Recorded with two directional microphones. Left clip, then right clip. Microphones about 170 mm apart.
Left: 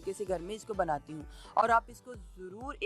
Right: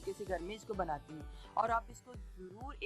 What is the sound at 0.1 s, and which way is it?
Speech, 35° left (ahead or behind).